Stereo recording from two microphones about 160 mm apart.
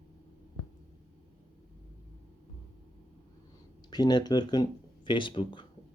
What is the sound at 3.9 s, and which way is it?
Speech, 25° left (ahead or behind).